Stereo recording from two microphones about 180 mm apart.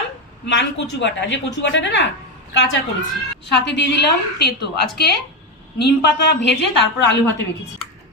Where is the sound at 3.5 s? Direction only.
75° left (ahead or behind).